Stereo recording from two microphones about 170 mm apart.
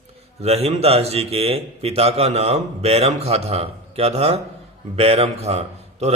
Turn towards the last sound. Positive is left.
turn(degrees=-40)  # may be behind; listen again after turning